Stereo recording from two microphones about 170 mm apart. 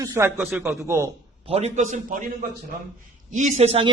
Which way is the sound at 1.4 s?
40° right (ahead or behind).